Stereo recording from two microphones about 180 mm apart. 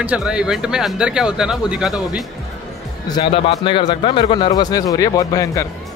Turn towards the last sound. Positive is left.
turn(degrees=20)  # may be behind; listen again after turning